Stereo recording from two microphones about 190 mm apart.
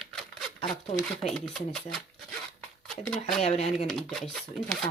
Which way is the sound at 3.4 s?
35° left (ahead or behind).